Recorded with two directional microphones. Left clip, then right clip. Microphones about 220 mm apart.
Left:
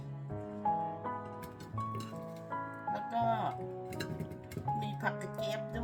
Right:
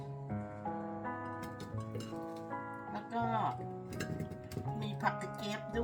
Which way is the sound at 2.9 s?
10° left (ahead or behind).